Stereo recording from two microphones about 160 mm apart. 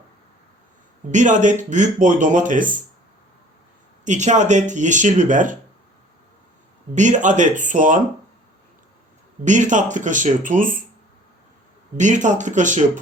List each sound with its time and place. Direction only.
1.1 s speech: 50° right (ahead or behind)
4.0 s speech: 50° right (ahead or behind)
6.9 s speech: 50° right (ahead or behind)
9.4 s speech: 50° right (ahead or behind)
11.9 s speech: 50° right (ahead or behind)